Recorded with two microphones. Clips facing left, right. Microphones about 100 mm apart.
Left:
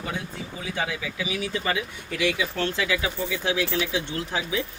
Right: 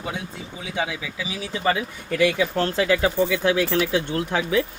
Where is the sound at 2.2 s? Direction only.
45° right (ahead or behind).